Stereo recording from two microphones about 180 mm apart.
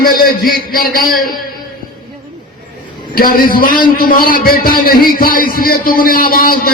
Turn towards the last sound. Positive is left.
turn(degrees=55)  # may be behind; listen again after turning